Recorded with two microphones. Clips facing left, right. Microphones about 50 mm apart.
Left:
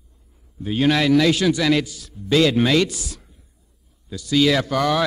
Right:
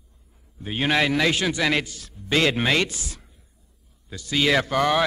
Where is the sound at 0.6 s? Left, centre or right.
Right.